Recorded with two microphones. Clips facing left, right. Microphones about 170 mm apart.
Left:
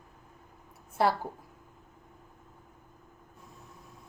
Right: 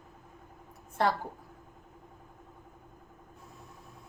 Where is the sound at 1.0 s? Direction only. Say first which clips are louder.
Left 2 dB; 10° left (ahead or behind).